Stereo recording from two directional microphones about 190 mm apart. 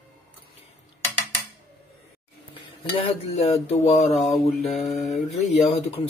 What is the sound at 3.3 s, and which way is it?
Speech, 30° left (ahead or behind).